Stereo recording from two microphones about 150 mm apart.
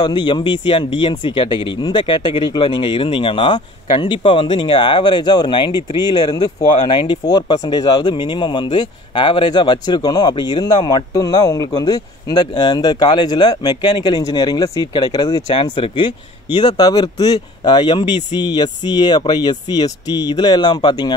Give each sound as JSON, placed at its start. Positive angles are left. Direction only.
{"t": 0.0, "sound": "speech", "side_deg": 30}